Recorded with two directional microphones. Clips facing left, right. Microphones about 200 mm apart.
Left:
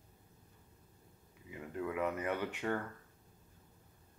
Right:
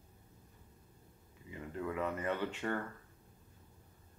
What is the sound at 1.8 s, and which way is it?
Speech, 10° left (ahead or behind).